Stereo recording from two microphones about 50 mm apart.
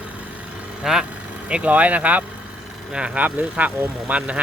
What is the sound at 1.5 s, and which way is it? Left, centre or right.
Speech, right.